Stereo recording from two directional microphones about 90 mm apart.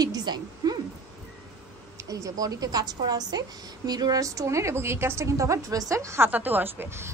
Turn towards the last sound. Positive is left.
turn(degrees=-25)  # may be behind; listen again after turning